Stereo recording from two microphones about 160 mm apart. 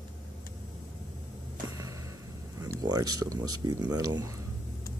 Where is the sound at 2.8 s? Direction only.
25° right (ahead or behind).